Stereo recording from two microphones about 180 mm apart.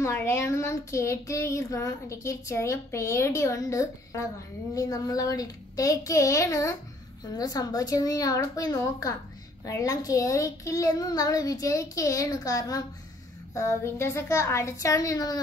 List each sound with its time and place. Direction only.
0.0 s a child's voice: 15° left (ahead or behind)